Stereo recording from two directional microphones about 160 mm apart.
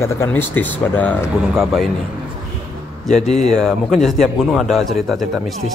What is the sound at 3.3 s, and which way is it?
Speech, 45° left (ahead or behind).